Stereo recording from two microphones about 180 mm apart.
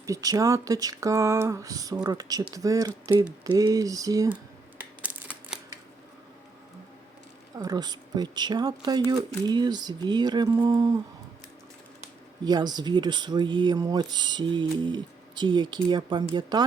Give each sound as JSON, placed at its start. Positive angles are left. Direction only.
{"t": 0.0, "sound": "speech", "side_deg": -20}
{"t": 4.8, "sound": "typewriter", "side_deg": -10}
{"t": 7.6, "sound": "speech", "side_deg": -20}
{"t": 12.5, "sound": "speech", "side_deg": -20}